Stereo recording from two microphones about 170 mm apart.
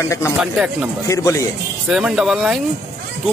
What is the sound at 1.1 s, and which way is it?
Speech, 15° left (ahead or behind).